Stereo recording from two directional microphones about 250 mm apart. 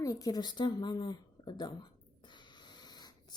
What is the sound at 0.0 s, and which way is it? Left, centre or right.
Speech, centre.